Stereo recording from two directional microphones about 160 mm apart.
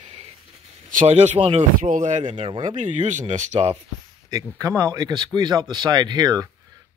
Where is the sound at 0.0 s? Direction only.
35° right (ahead or behind).